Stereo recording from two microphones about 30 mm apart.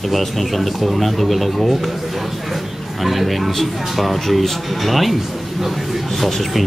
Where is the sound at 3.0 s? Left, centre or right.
Centre.